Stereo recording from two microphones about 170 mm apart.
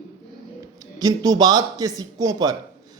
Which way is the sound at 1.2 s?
25° right (ahead or behind).